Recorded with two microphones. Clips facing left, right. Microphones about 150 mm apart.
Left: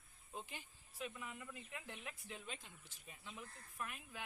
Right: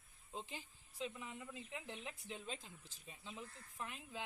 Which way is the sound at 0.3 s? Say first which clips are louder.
Right 2 dB; 25° right (ahead or behind).